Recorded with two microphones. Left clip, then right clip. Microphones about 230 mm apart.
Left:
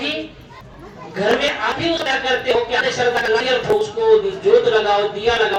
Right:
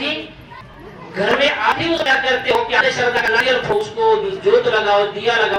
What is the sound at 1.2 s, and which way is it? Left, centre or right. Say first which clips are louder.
A man's voice: right 2 dB; left.